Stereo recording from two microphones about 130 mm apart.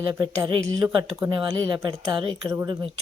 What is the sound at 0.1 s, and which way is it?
Speech, 35° right (ahead or behind).